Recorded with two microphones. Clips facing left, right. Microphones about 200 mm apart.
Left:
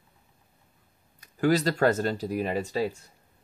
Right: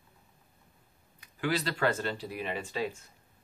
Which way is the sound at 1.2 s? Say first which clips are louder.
Left 8 dB; 45° left (ahead or behind).